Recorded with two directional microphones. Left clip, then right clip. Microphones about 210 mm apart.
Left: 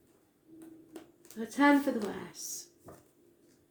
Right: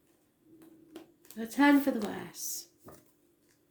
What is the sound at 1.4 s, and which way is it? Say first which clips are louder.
Speech: right 1 dB; 40° right (ahead or behind).